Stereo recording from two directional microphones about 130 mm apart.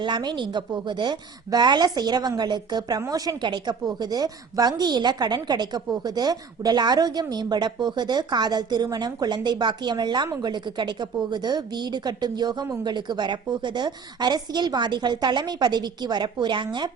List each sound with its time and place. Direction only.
0.0 s speech: 35° right (ahead or behind)